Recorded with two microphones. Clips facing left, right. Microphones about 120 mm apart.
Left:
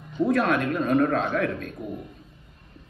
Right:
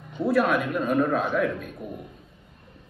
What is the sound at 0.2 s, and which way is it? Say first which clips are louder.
A man's voice: even; 5° right (ahead or behind).